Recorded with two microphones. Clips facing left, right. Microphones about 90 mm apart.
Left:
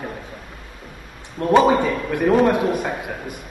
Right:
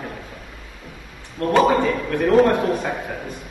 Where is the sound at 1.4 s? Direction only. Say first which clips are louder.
Left 1 dB; 15° left (ahead or behind).